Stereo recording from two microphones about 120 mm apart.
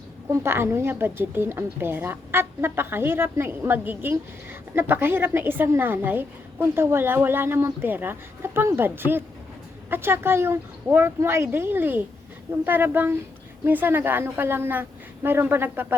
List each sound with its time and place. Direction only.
0.3 s a woman's voice: 20° right (ahead or behind)